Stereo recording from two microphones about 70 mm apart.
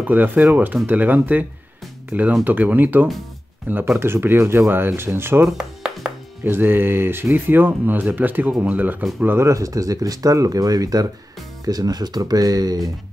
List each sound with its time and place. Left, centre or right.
0.0 s speech: right
5.6 s music: centre
6.4 s speech: right
9.5 s speech: right